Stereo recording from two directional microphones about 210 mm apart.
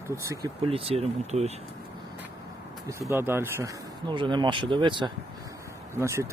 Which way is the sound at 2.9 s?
15° right (ahead or behind).